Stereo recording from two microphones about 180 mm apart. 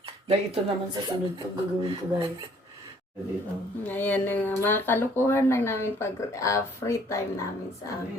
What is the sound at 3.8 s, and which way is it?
Speech, 10° left (ahead or behind).